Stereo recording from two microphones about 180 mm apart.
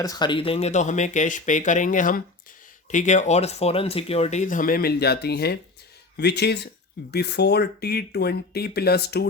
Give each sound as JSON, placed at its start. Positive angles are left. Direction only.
{"t": 0.0, "sound": "speech", "side_deg": 20}